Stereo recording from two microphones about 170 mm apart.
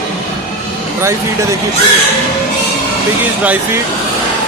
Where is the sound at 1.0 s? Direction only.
15° right (ahead or behind).